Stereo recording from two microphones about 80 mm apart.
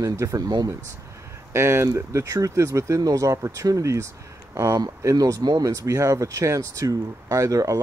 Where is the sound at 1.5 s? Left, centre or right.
Right.